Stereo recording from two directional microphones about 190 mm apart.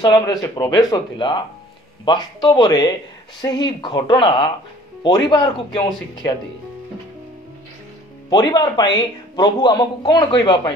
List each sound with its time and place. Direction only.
0.0 s speech: 20° left (ahead or behind)
8.3 s speech: 20° left (ahead or behind)